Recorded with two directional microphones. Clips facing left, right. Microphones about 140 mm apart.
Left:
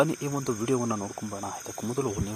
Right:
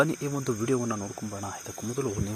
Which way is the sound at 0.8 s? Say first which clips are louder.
Left 1 dB; 30° left (ahead or behind).